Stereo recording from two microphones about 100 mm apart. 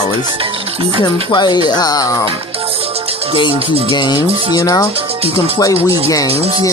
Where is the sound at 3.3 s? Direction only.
55° left (ahead or behind); by 4.9 s 35° left (ahead or behind).